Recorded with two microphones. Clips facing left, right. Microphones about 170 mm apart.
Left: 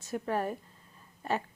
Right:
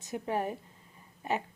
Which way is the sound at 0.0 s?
15° right (ahead or behind).